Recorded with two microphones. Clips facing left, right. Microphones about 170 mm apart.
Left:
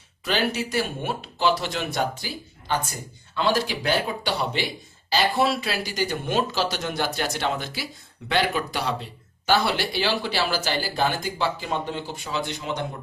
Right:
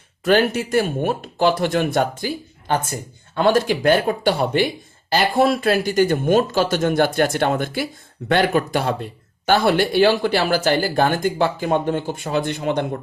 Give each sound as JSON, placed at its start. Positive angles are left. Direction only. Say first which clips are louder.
{"t": 0.3, "sound": "speech", "louder": "right 8 dB", "side_deg": -50}